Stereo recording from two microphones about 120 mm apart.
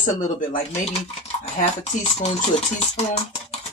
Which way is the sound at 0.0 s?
90° left.